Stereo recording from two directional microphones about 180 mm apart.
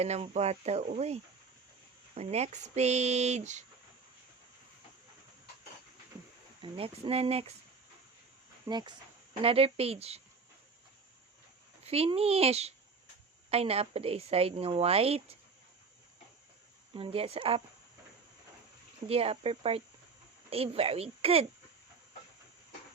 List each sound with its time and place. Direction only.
0.0 s a woman's voice: 35° right (ahead or behind)
6.6 s a woman's voice: 30° right (ahead or behind)
8.6 s a woman's voice: 25° right (ahead or behind)
11.8 s a woman's voice: 35° right (ahead or behind)
16.9 s a woman's voice: 30° right (ahead or behind)
19.0 s a woman's voice: 35° right (ahead or behind)